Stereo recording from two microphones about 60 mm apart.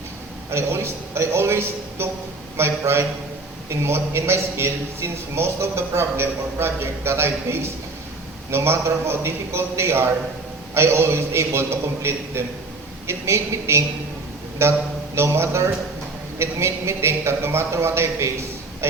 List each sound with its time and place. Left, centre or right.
0.5 s a man's voice: right